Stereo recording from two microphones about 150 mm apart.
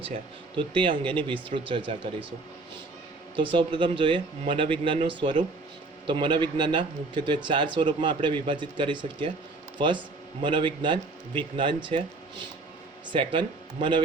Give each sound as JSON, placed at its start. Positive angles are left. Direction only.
{"t": 0.0, "sound": "a man's voice", "side_deg": -35}
{"t": 3.3, "sound": "a man's voice", "side_deg": -35}
{"t": 13.1, "sound": "a man's voice", "side_deg": -35}